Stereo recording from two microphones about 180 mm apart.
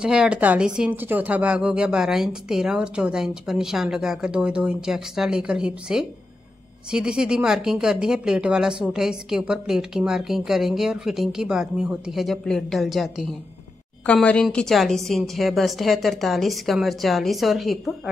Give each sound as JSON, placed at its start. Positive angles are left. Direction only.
{"t": 0.0, "sound": "speech", "side_deg": -5}